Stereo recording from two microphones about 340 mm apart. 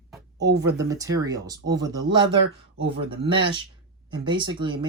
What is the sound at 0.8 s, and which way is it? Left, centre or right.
Speech, centre.